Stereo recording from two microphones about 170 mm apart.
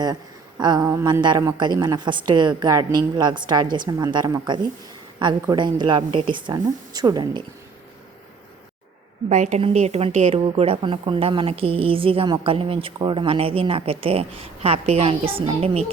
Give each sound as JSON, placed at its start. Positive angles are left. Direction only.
{"t": 0.6, "sound": "a woman's voice", "side_deg": -20}
{"t": 9.3, "sound": "a woman's voice", "side_deg": -45}